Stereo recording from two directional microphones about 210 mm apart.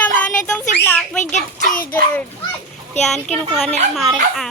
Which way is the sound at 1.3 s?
40° left (ahead or behind).